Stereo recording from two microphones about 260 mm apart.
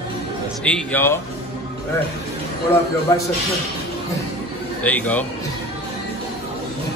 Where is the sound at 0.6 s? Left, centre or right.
Centre.